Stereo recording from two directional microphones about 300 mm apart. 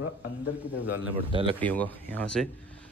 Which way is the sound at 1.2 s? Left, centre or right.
Centre.